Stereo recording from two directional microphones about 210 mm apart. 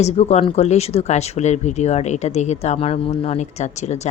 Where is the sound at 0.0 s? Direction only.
30° left (ahead or behind).